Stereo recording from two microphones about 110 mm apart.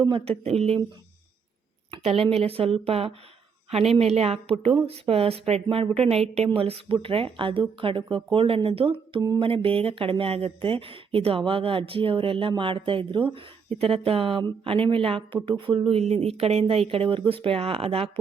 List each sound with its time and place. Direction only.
0.0 s speech: 55° right (ahead or behind)
2.0 s speech: 65° right (ahead or behind)
4.5 s speech: 50° right (ahead or behind)
5.0 s speech: 65° right (ahead or behind)